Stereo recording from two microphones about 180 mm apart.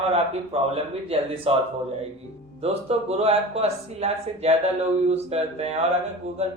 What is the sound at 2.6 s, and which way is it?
Speech, 35° right (ahead or behind).